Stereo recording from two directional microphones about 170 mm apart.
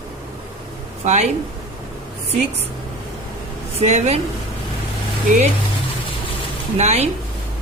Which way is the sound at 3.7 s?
40° right (ahead or behind).